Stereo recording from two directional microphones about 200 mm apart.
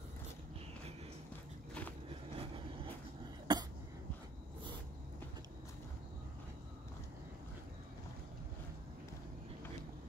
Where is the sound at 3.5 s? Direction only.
20° right (ahead or behind).